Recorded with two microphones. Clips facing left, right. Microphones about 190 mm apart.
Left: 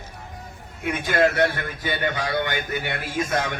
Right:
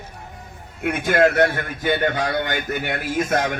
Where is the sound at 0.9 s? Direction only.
45° right (ahead or behind).